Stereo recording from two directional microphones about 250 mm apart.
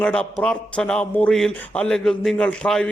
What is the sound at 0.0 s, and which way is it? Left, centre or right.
Speech, centre.